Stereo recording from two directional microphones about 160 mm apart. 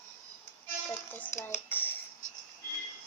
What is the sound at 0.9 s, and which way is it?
Speech, 15° left (ahead or behind).